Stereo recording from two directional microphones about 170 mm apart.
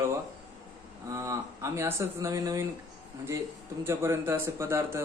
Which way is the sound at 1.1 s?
20° right (ahead or behind).